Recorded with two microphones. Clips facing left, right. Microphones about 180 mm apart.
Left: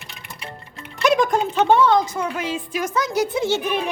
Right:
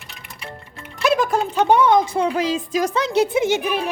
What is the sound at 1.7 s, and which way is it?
Speech, 20° right (ahead or behind).